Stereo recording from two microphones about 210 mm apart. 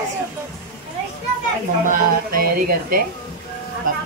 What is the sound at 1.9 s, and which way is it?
Speech, 45° right (ahead or behind).